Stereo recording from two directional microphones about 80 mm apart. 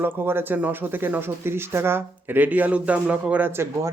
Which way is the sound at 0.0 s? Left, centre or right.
Right.